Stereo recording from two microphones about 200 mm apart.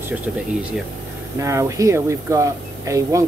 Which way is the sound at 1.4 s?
15° right (ahead or behind).